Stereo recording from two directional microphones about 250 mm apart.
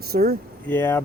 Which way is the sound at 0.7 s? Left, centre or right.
Centre.